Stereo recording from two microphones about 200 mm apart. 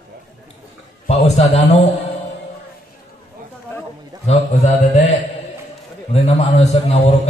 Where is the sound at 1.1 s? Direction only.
30° left (ahead or behind).